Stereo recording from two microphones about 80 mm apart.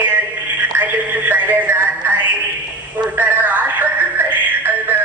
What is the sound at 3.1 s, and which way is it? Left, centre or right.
Music, right.